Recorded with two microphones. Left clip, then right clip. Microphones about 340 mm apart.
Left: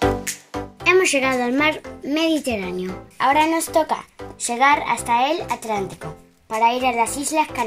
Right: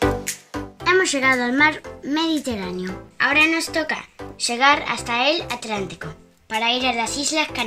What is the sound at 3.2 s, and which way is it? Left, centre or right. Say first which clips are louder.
Speech: even; centre.